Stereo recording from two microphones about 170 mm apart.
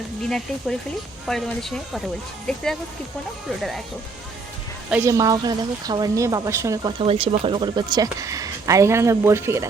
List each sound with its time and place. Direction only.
0.2 s speech: 5° left (ahead or behind)
4.9 s speech: 15° right (ahead or behind)
7.0 s speech: 35° right (ahead or behind); by 9.6 s 15° right (ahead or behind)